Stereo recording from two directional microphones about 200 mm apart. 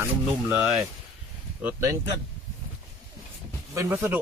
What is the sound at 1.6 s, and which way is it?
Speech, 15° right (ahead or behind).